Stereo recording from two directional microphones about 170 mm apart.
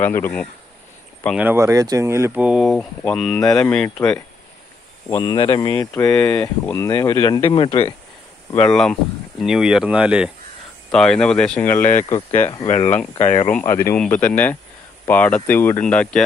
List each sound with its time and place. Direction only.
0.0 s speech: 10° left (ahead or behind)
1.4 s speech: 15° right (ahead or behind); by 4.2 s 5° left (ahead or behind)
5.0 s speech: 20° left (ahead or behind)
6.1 s speech: 5° left (ahead or behind); by 7.9 s 35° left (ahead or behind)
8.6 s speech: centre (ahead or behind)
12.6 s speech: 40° left (ahead or behind)
13.5 s speech: 10° left (ahead or behind)